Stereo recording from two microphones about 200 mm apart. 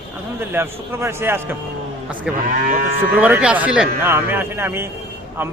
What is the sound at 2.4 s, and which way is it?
Speech, 45° right (ahead or behind).